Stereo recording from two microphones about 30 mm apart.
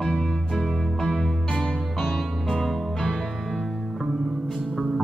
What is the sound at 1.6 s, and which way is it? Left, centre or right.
Music, left.